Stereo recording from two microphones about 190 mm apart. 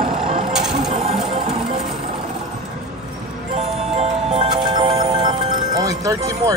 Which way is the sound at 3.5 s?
30° right (ahead or behind).